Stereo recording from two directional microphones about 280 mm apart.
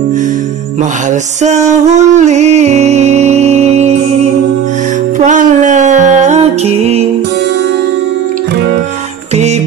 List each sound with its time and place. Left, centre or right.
1.4 s music: right